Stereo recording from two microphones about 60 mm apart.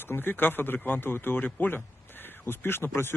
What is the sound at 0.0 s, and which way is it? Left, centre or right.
A man's voice, left.